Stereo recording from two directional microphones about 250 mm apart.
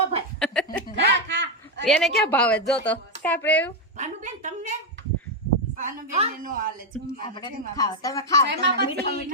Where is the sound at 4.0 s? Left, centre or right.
Right.